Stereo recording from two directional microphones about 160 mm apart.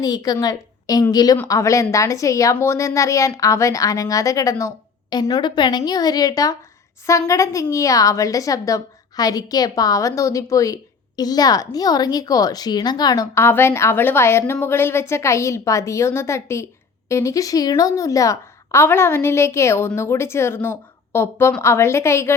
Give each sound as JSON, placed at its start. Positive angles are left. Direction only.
{"t": 0.0, "sound": "a woman's voice", "side_deg": 25}